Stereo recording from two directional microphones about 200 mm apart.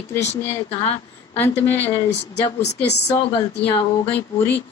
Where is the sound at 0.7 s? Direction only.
30° left (ahead or behind).